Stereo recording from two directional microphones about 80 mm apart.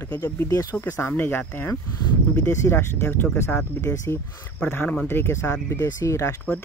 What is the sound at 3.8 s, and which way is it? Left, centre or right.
Speech, left.